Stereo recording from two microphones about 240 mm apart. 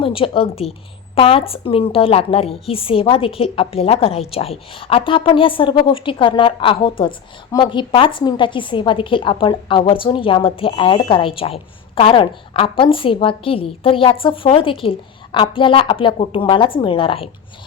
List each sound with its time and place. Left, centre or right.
0.0 s a woman's voice: left